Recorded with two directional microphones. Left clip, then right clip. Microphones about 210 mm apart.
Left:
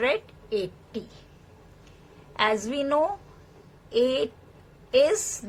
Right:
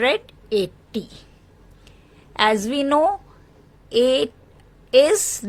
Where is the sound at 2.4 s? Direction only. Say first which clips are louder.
Right 6 dB; 45° right (ahead or behind).